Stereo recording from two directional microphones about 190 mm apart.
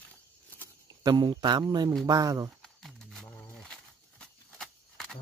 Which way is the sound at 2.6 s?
Centre (ahead or behind).